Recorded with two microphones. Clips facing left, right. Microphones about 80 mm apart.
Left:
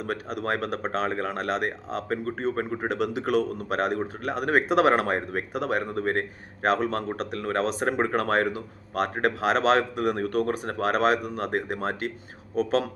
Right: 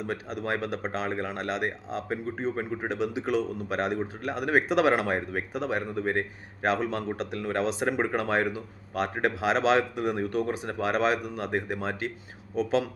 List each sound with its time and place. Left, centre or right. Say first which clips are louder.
0.0 s speech: left 2 dB; left